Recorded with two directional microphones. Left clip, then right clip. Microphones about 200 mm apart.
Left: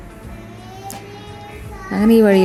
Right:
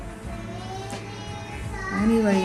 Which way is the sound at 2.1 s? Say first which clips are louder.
Left 11 dB; 45° left (ahead or behind).